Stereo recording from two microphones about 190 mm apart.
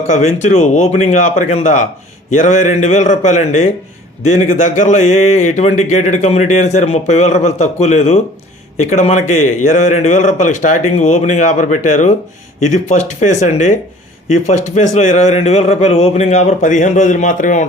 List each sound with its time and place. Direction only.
0.4 s speech: 40° left (ahead or behind)